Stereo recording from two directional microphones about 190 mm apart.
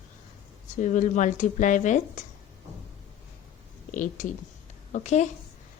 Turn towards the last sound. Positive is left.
turn(degrees=35)  # may be behind; listen again after turning